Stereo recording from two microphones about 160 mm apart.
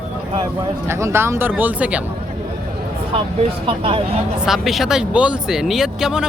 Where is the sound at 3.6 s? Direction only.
35° right (ahead or behind).